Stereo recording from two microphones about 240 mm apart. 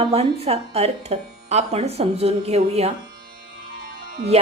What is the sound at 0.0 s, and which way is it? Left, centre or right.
Music, right.